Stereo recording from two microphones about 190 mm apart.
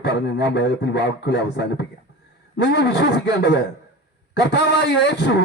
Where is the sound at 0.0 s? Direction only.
60° left (ahead or behind).